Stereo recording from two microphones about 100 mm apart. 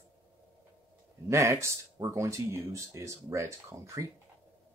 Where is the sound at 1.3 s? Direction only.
30° right (ahead or behind).